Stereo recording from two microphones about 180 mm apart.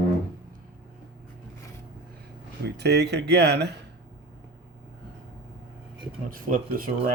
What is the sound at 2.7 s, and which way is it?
Speech, 70° right (ahead or behind).